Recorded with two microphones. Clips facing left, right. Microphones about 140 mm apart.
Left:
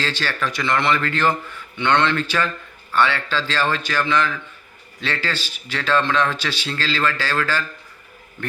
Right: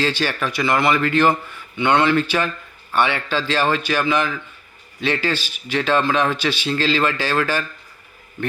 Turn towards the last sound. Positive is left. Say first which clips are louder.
# right 2 dB
turn(degrees=-15)  # may be behind; listen again after turning